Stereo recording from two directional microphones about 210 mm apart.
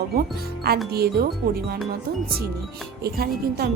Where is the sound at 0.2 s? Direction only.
45° right (ahead or behind).